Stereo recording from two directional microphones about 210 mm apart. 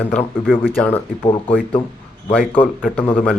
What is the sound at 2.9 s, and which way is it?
Speech, 5° left (ahead or behind).